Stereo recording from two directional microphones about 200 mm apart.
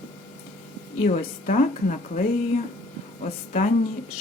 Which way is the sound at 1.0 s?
40° left (ahead or behind).